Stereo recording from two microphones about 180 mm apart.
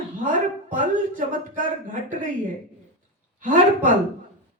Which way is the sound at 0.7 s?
45° right (ahead or behind).